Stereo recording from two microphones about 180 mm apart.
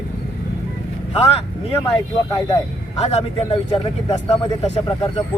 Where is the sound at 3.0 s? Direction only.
40° left (ahead or behind).